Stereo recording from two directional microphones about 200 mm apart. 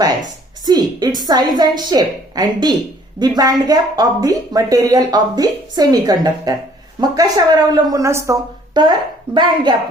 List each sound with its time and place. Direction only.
0.6 s a woman's voice: 20° right (ahead or behind)